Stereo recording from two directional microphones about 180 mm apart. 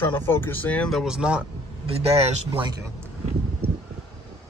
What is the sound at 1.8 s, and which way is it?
Speech, 35° right (ahead or behind).